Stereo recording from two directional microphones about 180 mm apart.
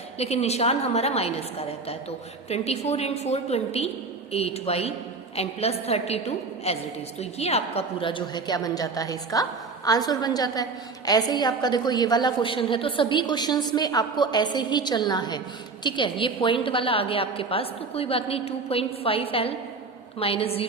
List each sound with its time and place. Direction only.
0.2 s a woman's voice: 35° left (ahead or behind)